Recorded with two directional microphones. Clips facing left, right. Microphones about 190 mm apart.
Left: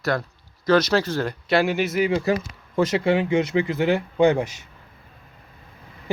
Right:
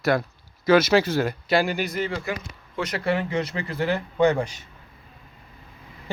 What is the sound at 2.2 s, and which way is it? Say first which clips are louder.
Speech: left 8 dB; 35° left (ahead or behind).